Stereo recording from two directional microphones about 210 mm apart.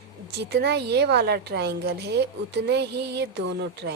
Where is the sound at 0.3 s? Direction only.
50° right (ahead or behind).